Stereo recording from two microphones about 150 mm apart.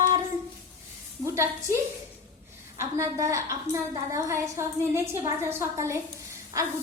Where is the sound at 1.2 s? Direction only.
20° right (ahead or behind).